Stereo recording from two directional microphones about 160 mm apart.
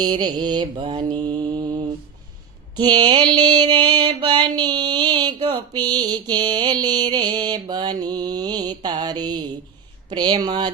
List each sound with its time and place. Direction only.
0.0 s mantra: 25° right (ahead or behind)
10.1 s speech: 25° right (ahead or behind)
10.4 s mantra: 30° right (ahead or behind)